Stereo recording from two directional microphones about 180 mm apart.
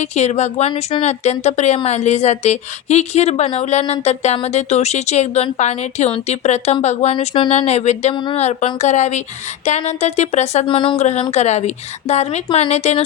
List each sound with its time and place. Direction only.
0.0 s a woman's voice: 40° left (ahead or behind)
8.1 s speech: 25° left (ahead or behind)
8.4 s a woman's voice: 40° left (ahead or behind)